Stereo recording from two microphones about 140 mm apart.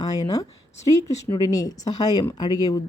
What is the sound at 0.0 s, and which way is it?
A woman's voice, 25° left (ahead or behind).